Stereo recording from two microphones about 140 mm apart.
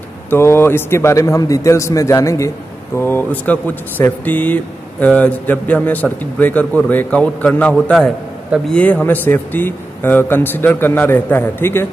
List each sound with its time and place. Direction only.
0.3 s a man's voice: 15° left (ahead or behind)